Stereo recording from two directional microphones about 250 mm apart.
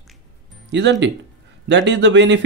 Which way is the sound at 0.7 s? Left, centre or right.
Right.